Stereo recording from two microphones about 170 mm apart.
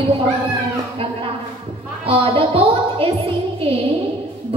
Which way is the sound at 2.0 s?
35° right (ahead or behind).